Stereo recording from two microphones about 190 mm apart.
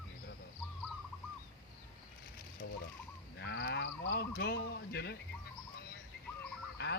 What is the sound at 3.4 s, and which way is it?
Speech, 65° left (ahead or behind).